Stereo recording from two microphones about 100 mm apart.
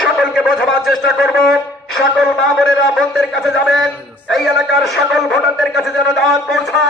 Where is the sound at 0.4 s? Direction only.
Centre (ahead or behind).